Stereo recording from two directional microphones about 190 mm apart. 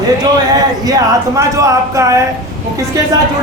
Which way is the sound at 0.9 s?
15° right (ahead or behind).